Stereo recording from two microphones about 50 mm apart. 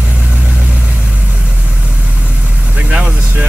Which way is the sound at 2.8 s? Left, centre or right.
Right.